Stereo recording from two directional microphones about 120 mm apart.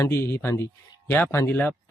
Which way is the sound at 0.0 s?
20° left (ahead or behind).